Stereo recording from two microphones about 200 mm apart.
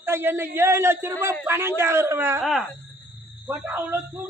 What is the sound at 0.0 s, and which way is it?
A man's voice, 10° right (ahead or behind).